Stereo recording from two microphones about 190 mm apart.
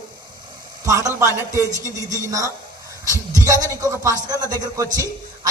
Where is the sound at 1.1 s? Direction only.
15° right (ahead or behind).